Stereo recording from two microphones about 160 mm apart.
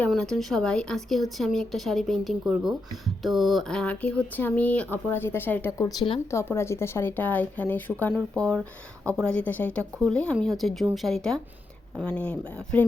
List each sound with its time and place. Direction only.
0.1 s speech: 5° left (ahead or behind)